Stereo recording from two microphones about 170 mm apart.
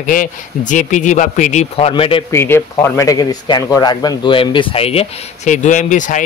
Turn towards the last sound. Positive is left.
turn(degrees=45)  # may be behind; listen again after turning